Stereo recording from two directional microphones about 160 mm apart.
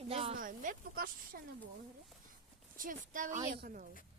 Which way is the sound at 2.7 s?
60° right (ahead or behind).